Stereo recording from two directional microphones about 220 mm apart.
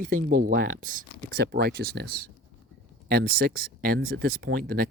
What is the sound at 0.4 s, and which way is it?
Speech, 40° right (ahead or behind).